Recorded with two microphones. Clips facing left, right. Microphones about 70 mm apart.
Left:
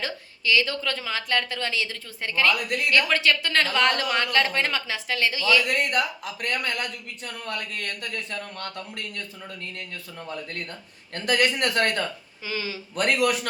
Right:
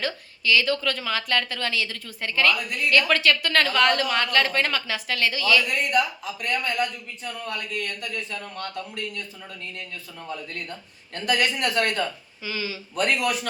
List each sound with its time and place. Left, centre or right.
0.0 s a woman's voice: left
5.6 s speech: left
11.1 s speech: left
12.5 s speech: left
13.0 s speech: left